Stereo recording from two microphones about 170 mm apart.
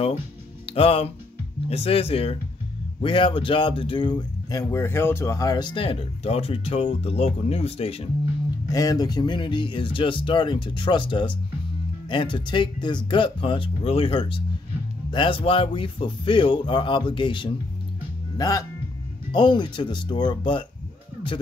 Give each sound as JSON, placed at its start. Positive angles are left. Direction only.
{"t": 0.7, "sound": "speech", "side_deg": 35}
{"t": 8.6, "sound": "speech", "side_deg": 20}